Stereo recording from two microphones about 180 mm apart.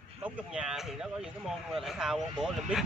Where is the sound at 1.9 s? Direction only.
5° right (ahead or behind).